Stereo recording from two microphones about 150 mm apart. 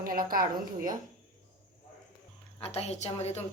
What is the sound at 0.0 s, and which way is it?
Speech, 75° right (ahead or behind).